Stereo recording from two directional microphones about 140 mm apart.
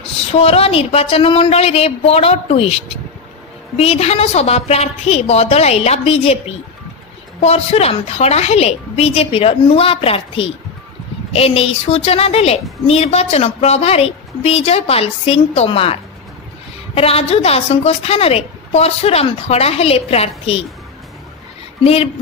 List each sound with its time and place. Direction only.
0.3 s a woman's voice: 45° left (ahead or behind)
7.4 s a woman's voice: 45° left (ahead or behind)
21.8 s a woman's voice: 45° left (ahead or behind)